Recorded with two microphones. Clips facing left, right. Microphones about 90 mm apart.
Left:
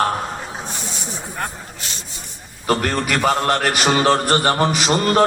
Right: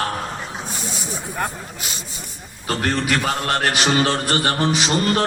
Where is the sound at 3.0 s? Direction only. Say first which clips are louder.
Left 3 dB; 45° left (ahead or behind).